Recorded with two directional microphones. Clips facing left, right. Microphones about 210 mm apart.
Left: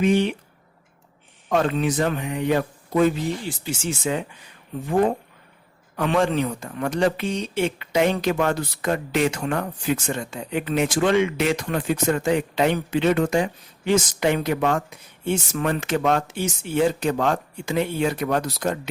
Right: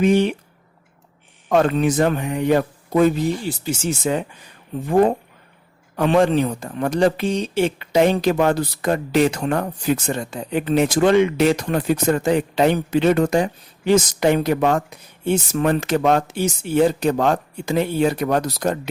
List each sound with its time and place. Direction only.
0.0 s speech: 45° right (ahead or behind)
1.5 s speech: 50° right (ahead or behind)
6.0 s speech: 35° right (ahead or behind)